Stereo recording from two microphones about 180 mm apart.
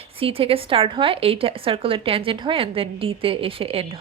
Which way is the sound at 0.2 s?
30° right (ahead or behind).